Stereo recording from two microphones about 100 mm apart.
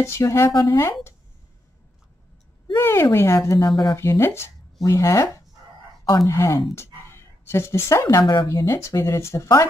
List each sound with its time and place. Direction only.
0.0 s speech: 25° left (ahead or behind)
2.8 s speech: 25° left (ahead or behind)